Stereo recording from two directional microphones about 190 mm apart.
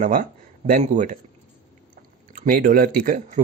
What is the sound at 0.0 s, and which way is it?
A man's voice, 45° right (ahead or behind).